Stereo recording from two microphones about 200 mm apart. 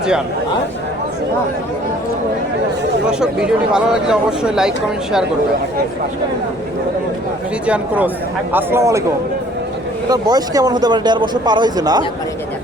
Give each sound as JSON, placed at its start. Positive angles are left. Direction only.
{"t": 3.1, "sound": "speech", "side_deg": -5}
{"t": 7.7, "sound": "speech", "side_deg": -5}
{"t": 10.1, "sound": "speech", "side_deg": -20}